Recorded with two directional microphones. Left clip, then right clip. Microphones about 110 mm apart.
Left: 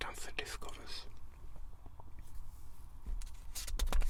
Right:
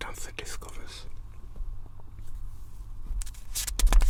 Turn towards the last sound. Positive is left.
turn(degrees=40)  # may be behind; listen again after turning